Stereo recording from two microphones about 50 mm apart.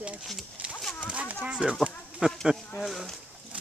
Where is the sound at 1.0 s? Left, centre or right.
Right.